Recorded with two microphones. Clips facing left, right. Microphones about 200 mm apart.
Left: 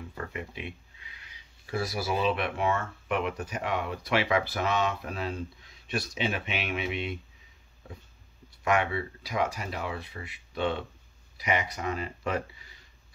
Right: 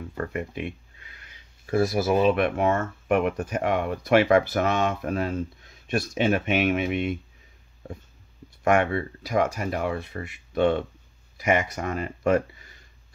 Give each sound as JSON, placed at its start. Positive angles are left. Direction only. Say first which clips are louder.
{"t": 0.3, "sound": "speech", "louder": "right 7 dB", "side_deg": -50}
{"t": 8.6, "sound": "speech", "louder": "right 5 dB", "side_deg": -50}